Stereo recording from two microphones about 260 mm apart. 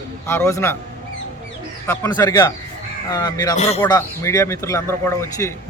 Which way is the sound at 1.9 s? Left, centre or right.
Centre.